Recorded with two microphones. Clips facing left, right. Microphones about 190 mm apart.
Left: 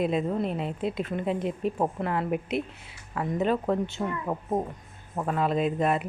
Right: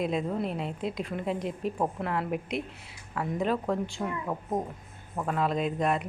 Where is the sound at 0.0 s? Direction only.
Centre (ahead or behind).